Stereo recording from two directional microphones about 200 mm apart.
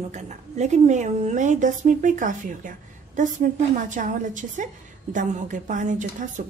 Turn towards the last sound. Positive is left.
turn(degrees=-40)  # may be behind; listen again after turning